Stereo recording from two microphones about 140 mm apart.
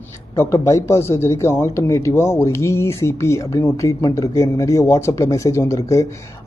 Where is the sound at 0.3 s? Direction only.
20° left (ahead or behind).